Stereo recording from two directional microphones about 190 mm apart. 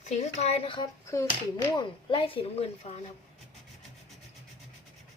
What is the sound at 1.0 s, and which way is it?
A child's voice, 15° left (ahead or behind).